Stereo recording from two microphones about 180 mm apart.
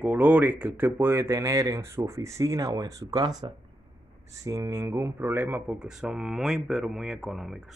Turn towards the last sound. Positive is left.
turn(degrees=0)  # may be behind; listen again after turning